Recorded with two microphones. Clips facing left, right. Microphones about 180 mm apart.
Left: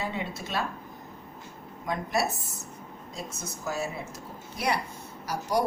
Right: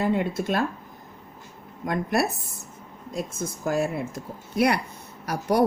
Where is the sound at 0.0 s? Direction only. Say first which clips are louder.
Right 9 dB; 50° right (ahead or behind).